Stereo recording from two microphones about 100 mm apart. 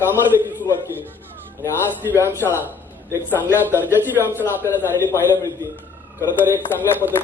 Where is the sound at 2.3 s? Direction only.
25° left (ahead or behind).